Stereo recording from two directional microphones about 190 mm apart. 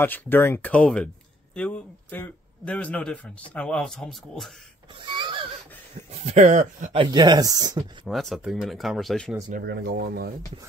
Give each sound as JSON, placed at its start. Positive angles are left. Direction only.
{"t": 0.0, "sound": "a man's voice", "side_deg": 10}
{"t": 5.0, "sound": "a sound", "side_deg": -25}
{"t": 6.2, "sound": "speech", "side_deg": -40}
{"t": 7.0, "sound": "speech", "side_deg": -25}
{"t": 8.1, "sound": "a man's voice", "side_deg": 0}
{"t": 9.5, "sound": "speech", "side_deg": -55}